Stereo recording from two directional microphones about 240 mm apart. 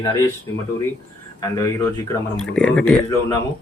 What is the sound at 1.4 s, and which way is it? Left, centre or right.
Speech, centre.